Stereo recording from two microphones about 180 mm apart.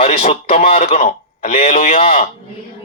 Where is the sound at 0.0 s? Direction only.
35° left (ahead or behind).